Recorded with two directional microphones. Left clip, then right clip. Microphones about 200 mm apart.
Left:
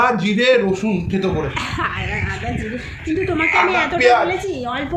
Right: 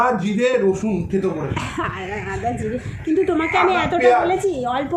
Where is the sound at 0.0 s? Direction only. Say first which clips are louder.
Left 2 dB; 35° left (ahead or behind).